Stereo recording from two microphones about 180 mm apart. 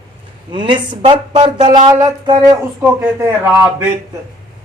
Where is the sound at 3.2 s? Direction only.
10° right (ahead or behind).